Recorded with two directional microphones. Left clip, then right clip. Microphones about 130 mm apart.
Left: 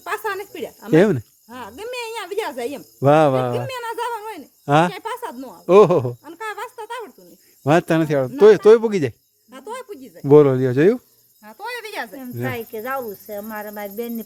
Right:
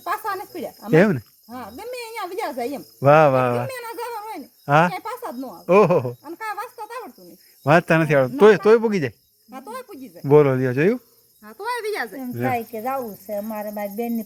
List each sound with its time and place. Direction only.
0.0 s cricket: 35° left (ahead or behind)
3.0 s cat: 40° left (ahead or behind)
4.6 s speech: 45° left (ahead or behind)
4.9 s cricket: 35° left (ahead or behind)
5.6 s speech: 45° left (ahead or behind)
6.2 s insect: 35° left (ahead or behind)
7.6 s speech: 35° left (ahead or behind)
8.5 s speech: 50° left (ahead or behind)
10.2 s speech: 45° left (ahead or behind)
11.4 s cricket: 90° left
12.5 s speech: 25° left (ahead or behind)